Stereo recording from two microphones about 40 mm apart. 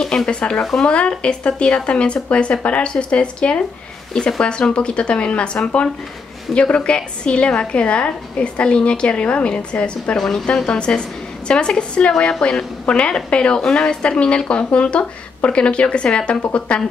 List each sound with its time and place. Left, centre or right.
0.0 s speech: centre
10.1 s speech: centre
10.7 s speech: left